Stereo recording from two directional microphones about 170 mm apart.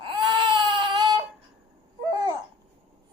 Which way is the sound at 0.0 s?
30° right (ahead or behind).